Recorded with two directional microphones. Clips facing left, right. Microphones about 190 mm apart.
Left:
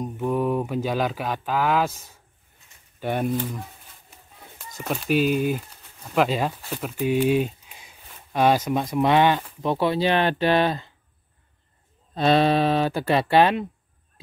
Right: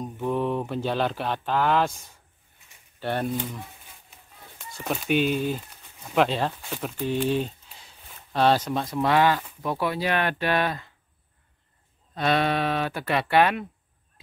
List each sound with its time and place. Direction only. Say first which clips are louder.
0.0 s speech: left 2 dB; 5° left (ahead or behind)
4.8 s speech: left 2 dB; centre (ahead or behind); by 10.9 s 30° left (ahead or behind)
12.1 s speech: left 5 dB; 30° left (ahead or behind)